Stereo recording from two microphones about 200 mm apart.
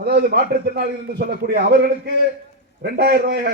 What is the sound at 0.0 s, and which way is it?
Speech, 50° right (ahead or behind).